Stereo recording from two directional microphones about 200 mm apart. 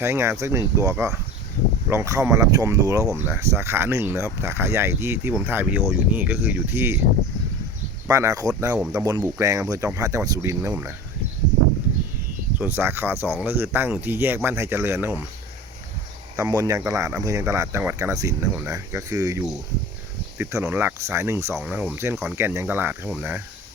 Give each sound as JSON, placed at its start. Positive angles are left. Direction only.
{"t": 0.0, "sound": "speech", "side_deg": -10}
{"t": 8.0, "sound": "speech", "side_deg": -15}
{"t": 12.5, "sound": "speech", "side_deg": -10}
{"t": 16.4, "sound": "speech", "side_deg": -15}